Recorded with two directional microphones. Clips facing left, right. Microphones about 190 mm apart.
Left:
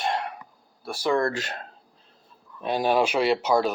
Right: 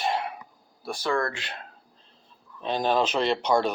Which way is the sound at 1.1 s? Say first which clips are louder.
Left 4 dB; 20° left (ahead or behind).